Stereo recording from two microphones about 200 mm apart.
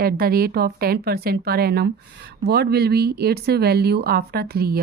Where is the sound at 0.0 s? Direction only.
50° right (ahead or behind).